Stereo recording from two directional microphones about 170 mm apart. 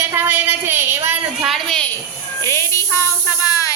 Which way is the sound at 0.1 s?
15° right (ahead or behind).